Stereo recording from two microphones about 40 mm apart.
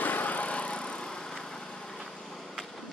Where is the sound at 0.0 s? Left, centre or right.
Left; by 2.0 s centre.